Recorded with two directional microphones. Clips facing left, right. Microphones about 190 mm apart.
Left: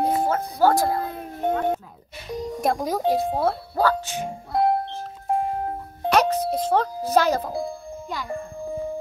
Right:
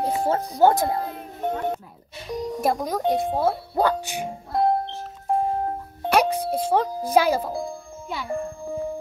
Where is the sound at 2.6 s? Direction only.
Centre (ahead or behind).